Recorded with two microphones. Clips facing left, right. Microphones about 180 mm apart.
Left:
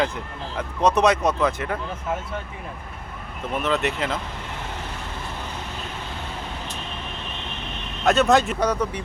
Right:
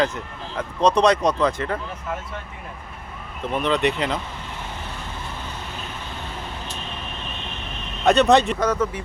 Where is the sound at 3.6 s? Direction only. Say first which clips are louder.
Right 3 dB; 5° left (ahead or behind).